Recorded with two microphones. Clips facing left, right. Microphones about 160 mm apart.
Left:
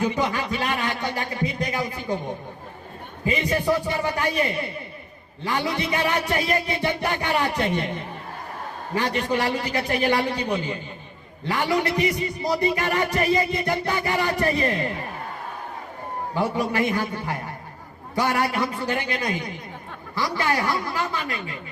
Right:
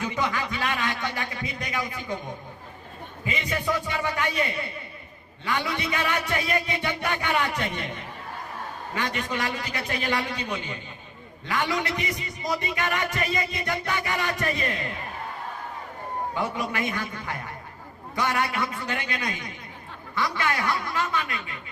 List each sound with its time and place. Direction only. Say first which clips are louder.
0.0 s a man's voice: left 4 dB; 30° left (ahead or behind)
3.2 s a man's voice: left 6 dB; 35° left (ahead or behind)
9.0 s a man's voice: left 6 dB; 30° left (ahead or behind)
16.3 s a man's voice: left 7 dB; 30° left (ahead or behind)